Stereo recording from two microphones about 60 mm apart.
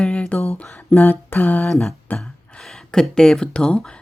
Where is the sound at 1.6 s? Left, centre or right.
Centre.